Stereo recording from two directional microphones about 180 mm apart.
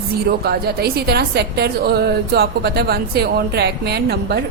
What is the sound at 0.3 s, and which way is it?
A woman's voice, 60° right (ahead or behind).